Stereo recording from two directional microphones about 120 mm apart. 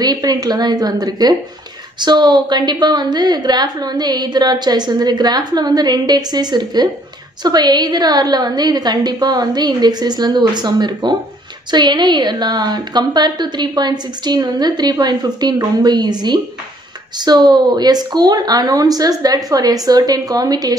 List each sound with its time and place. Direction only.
0.0 s a woman's voice: 35° right (ahead or behind)